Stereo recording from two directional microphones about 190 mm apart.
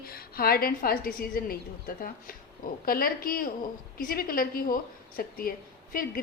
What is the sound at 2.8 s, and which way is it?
A woman's voice, 50° left (ahead or behind).